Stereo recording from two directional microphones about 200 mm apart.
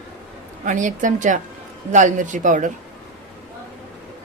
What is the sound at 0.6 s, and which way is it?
Speech, 40° right (ahead or behind).